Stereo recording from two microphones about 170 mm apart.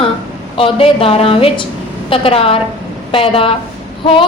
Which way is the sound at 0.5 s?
35° left (ahead or behind).